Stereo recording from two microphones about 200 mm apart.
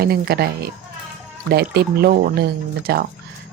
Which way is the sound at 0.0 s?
50° right (ahead or behind).